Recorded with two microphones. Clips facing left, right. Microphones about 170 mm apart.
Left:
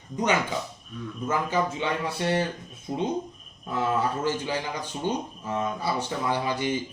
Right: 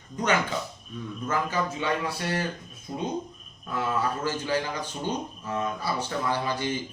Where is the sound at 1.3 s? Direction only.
20° left (ahead or behind).